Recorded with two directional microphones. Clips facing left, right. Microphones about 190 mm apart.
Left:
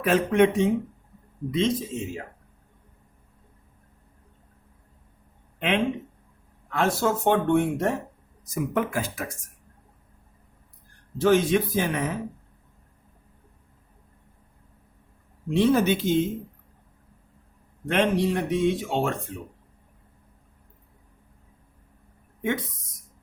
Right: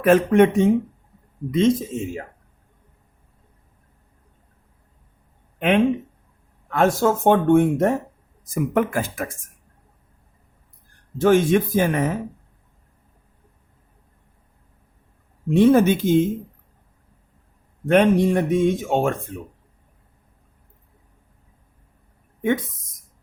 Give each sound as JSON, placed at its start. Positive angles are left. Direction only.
{"t": 0.0, "sound": "speech", "side_deg": -50}
{"t": 5.5, "sound": "speech", "side_deg": -50}
{"t": 11.2, "sound": "speech", "side_deg": -50}
{"t": 15.4, "sound": "speech", "side_deg": -50}
{"t": 17.8, "sound": "speech", "side_deg": -45}